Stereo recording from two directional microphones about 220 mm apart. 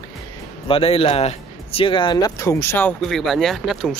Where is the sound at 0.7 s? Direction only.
25° left (ahead or behind); by 3.9 s centre (ahead or behind).